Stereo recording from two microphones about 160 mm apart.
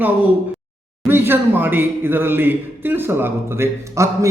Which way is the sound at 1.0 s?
15° right (ahead or behind).